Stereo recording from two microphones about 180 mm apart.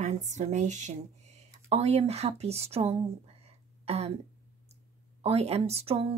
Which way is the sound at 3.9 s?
35° right (ahead or behind).